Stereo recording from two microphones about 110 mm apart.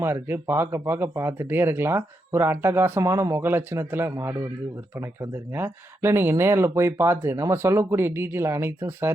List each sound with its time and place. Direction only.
0.0 s speech: 20° right (ahead or behind)